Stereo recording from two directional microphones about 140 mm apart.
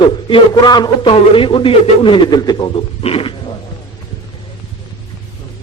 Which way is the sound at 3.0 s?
45° left (ahead or behind).